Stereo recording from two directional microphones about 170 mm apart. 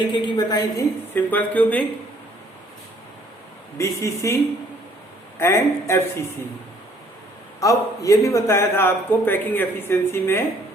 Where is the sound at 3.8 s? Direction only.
15° left (ahead or behind).